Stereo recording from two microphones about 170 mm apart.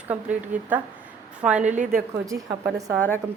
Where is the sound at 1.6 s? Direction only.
45° right (ahead or behind).